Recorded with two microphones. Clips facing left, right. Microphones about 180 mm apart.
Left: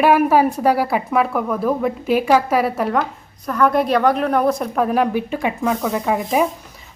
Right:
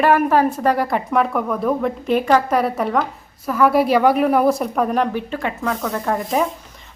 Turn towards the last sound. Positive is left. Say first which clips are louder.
# left 2 dB
turn(degrees=10)  # may be behind; listen again after turning